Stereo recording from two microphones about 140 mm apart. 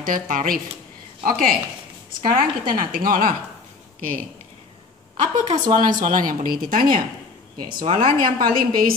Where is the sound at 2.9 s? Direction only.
85° right.